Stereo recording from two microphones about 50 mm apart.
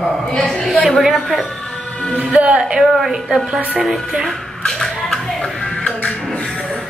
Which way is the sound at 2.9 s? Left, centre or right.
Centre.